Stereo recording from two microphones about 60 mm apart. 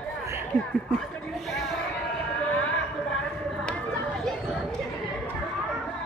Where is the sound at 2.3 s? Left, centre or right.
Centre.